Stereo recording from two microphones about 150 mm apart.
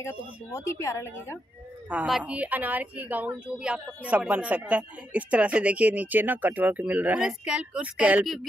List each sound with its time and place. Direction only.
0.0 s speech: 20° left (ahead or behind)
1.9 s a woman's voice: 5° right (ahead or behind)